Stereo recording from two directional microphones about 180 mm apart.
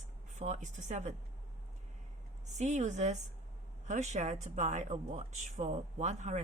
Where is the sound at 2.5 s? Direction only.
40° right (ahead or behind).